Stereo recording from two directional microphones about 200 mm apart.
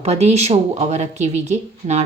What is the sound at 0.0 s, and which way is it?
Speech, 35° right (ahead or behind).